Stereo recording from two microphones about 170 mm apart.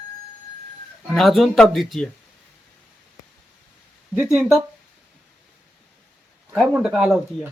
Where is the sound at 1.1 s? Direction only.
Centre (ahead or behind).